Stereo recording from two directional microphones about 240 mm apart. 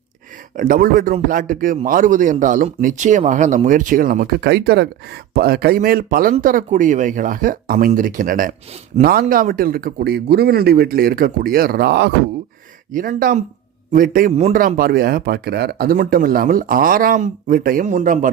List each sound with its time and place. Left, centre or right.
0.5 s speech: right